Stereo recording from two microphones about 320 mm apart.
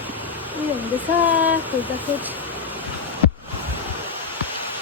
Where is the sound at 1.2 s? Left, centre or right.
Centre.